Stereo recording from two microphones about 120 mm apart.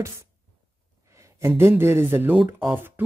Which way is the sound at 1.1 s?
25° right (ahead or behind).